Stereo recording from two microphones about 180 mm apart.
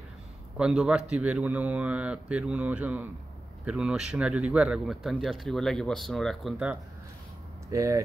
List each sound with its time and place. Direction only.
0.6 s a man's voice: 5° right (ahead or behind)
7.7 s a man's voice: 15° right (ahead or behind)